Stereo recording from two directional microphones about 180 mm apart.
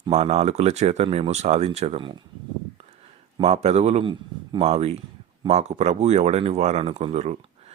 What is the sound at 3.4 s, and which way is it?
Speech, 35° right (ahead or behind).